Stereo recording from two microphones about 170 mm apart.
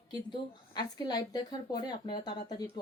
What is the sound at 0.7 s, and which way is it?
Speech, 25° left (ahead or behind).